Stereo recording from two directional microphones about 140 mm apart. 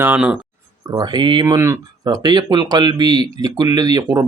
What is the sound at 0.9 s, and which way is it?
Speech, 30° right (ahead or behind).